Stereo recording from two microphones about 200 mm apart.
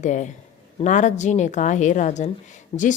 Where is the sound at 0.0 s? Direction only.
35° left (ahead or behind).